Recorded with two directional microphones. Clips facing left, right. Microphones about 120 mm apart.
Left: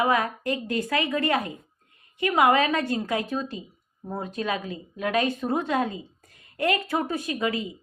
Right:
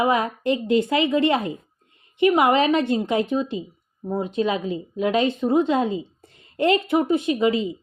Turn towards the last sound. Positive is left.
turn(degrees=-20)  # may be behind; listen again after turning